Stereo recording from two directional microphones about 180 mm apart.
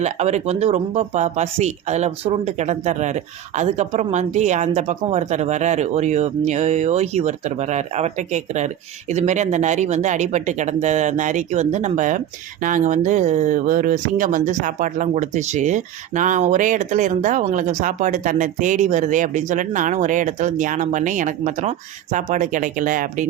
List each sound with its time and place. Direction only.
0.0 s speech: 40° right (ahead or behind)